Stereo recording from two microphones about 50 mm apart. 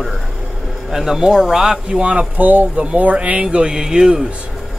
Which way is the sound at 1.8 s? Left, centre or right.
Right.